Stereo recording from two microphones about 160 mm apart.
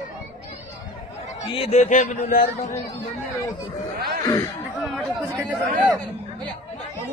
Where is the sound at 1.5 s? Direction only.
40° left (ahead or behind).